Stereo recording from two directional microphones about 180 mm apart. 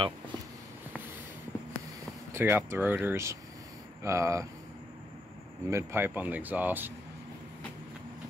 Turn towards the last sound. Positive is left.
turn(degrees=-10)  # may be behind; listen again after turning